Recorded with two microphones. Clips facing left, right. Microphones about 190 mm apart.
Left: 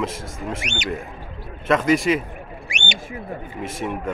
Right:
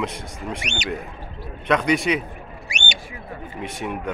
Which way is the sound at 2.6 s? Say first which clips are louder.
Left 1 dB; 35° right (ahead or behind).